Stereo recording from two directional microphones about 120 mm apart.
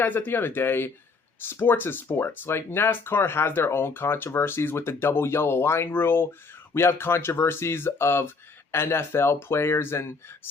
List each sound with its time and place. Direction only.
0.0 s speech: 15° left (ahead or behind)